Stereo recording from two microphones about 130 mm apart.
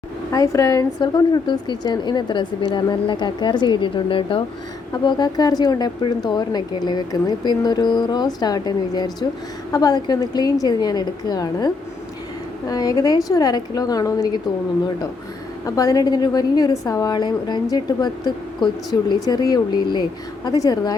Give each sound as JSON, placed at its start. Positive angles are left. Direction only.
{"t": 0.3, "sound": "a woman's voice", "side_deg": 25}
{"t": 15.6, "sound": "a woman's voice", "side_deg": 25}